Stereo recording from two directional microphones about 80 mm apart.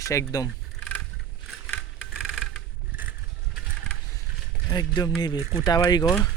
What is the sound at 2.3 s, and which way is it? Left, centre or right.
Vehicle, centre.